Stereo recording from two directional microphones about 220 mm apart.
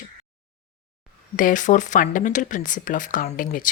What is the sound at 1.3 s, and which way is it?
Speech, 35° left (ahead or behind).